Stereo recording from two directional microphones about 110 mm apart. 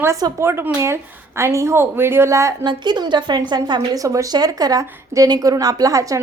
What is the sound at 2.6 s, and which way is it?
A woman's voice, 40° right (ahead or behind).